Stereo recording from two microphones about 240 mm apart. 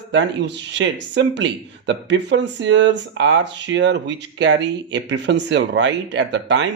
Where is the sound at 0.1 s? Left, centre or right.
Right.